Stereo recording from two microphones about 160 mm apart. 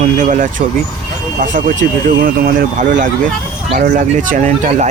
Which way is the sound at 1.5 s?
55° right (ahead or behind).